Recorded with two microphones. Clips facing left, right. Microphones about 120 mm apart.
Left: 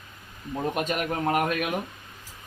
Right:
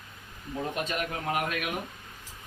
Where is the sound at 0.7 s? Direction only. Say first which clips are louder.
Left 5 dB; 55° left (ahead or behind).